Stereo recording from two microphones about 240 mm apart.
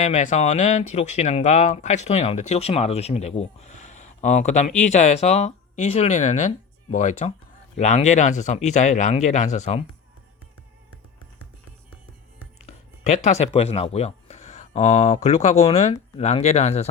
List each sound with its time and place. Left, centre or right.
0.0 s speech: left
12.6 s speech: left